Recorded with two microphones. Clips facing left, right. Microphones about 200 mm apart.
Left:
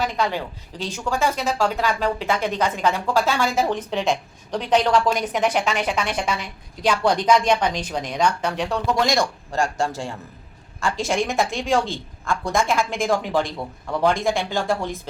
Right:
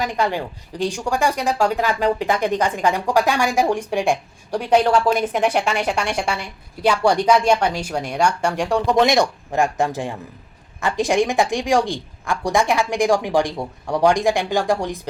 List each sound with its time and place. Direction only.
0.0 s a woman's voice: 15° right (ahead or behind)